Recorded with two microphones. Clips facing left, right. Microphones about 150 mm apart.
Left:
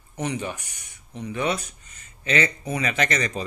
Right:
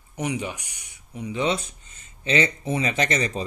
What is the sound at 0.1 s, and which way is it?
Speech, 15° right (ahead or behind).